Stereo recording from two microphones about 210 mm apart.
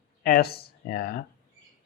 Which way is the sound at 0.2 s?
45° left (ahead or behind).